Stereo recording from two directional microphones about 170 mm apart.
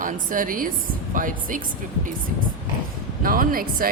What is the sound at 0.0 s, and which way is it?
A woman's voice, 55° right (ahead or behind).